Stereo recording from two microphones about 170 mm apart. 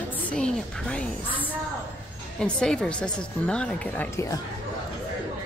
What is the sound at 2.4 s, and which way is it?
A woman's voice, 5° left (ahead or behind).